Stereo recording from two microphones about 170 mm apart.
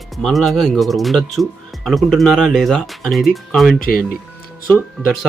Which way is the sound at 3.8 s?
60° left (ahead or behind).